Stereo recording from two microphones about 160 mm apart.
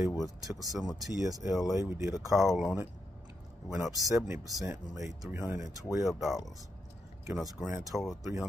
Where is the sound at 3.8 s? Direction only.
20° right (ahead or behind).